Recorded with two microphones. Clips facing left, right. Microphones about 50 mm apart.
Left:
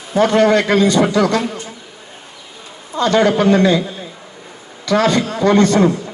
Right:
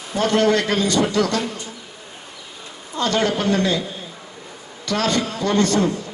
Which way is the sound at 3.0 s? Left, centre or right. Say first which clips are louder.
Left 7 dB; left.